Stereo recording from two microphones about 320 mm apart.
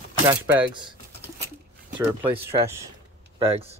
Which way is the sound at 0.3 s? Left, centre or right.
Centre.